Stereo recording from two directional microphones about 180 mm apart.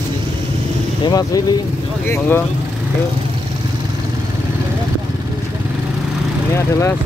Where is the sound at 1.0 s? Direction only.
20° left (ahead or behind).